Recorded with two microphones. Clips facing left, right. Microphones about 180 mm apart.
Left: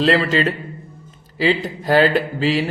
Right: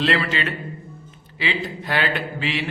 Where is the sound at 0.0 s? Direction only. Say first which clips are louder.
Left 6 dB; 40° left (ahead or behind).